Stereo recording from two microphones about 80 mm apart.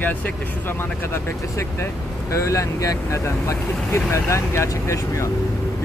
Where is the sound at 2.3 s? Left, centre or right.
Left.